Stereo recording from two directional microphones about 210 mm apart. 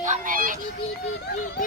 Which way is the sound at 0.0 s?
40° right (ahead or behind).